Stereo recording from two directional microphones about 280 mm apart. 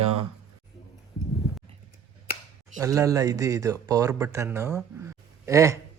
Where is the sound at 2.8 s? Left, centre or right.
Centre.